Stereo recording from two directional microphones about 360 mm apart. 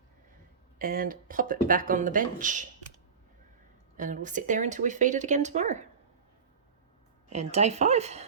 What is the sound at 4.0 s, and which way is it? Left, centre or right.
Speech, right.